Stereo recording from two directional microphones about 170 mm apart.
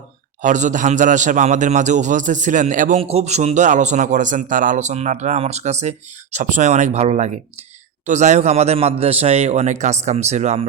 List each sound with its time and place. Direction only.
0.4 s a man's voice: 45° right (ahead or behind)
3.0 s a man's voice: 35° right (ahead or behind)